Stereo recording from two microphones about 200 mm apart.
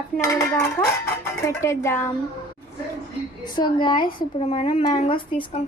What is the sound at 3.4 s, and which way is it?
A woman's voice, 25° left (ahead or behind).